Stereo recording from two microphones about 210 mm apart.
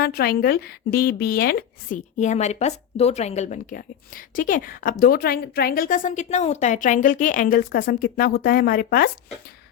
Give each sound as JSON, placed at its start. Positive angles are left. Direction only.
{"t": 0.0, "sound": "speech", "side_deg": 45}